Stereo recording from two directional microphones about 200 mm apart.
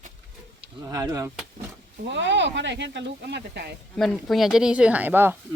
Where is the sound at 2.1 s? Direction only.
60° right (ahead or behind).